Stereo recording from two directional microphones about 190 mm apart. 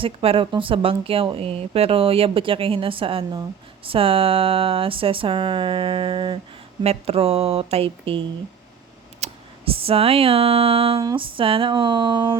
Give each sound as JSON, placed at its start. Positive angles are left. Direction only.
{"t": 0.0, "sound": "speech", "side_deg": -30}
{"t": 9.2, "sound": "a sound", "side_deg": -30}
{"t": 11.0, "sound": "speech", "side_deg": -25}